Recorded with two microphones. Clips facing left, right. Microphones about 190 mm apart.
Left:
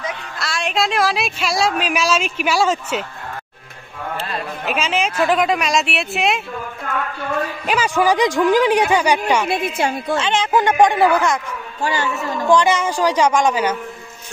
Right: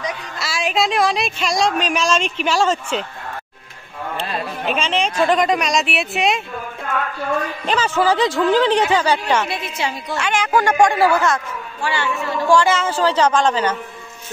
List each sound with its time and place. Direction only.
0.0 s speech: centre (ahead or behind)
4.6 s speech: 5° left (ahead or behind)
7.6 s speech: 10° left (ahead or behind)
9.5 s a man's voice: 55° left (ahead or behind)
10.1 s a child's voice: 25° left (ahead or behind)
11.8 s a man's voice: 40° left (ahead or behind)
12.4 s speech: 20° left (ahead or behind)